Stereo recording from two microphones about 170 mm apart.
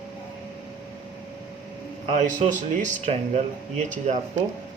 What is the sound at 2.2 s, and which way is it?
Speech, 45° right (ahead or behind).